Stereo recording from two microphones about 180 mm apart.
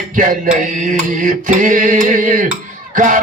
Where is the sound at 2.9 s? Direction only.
45° right (ahead or behind).